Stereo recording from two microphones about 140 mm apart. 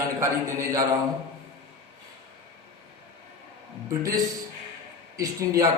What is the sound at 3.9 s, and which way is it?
Speech, 25° right (ahead or behind).